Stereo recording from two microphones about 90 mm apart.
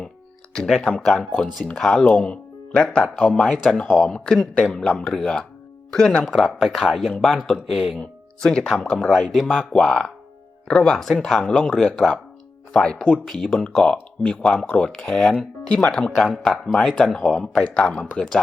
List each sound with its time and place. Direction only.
0.5 s speech: 5° left (ahead or behind)
7.9 s speech: 10° left (ahead or behind)